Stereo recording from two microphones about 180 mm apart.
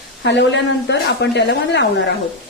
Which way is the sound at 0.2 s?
75° left (ahead or behind).